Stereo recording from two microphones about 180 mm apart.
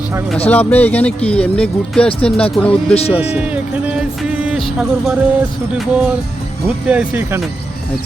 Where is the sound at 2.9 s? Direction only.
35° left (ahead or behind).